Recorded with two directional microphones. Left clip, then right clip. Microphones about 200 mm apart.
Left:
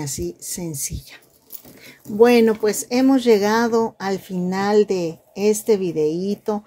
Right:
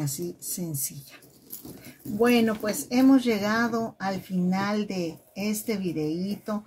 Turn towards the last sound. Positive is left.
turn(degrees=40)  # may be behind; listen again after turning